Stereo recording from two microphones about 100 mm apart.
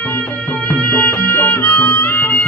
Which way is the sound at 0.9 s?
15° left (ahead or behind).